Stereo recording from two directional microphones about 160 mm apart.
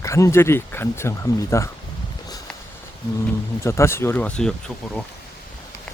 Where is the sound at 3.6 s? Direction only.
15° left (ahead or behind).